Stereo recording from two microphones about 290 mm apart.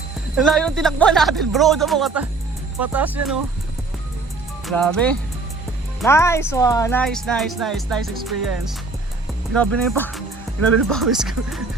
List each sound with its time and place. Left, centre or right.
0.3 s speech: centre
4.6 s speech: centre